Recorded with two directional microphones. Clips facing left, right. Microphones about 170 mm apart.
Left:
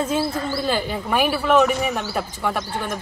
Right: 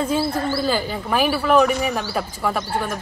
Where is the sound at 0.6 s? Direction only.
Centre (ahead or behind).